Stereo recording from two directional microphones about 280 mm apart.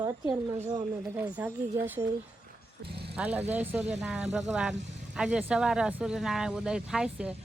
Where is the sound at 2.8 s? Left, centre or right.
Right.